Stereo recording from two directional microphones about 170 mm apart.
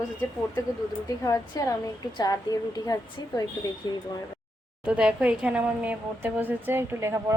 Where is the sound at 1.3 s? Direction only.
20° left (ahead or behind).